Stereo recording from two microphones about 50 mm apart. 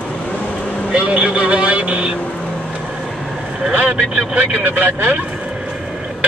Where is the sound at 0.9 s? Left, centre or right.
Right.